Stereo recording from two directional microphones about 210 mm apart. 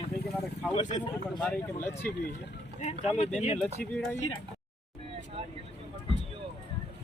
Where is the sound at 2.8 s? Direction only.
30° left (ahead or behind).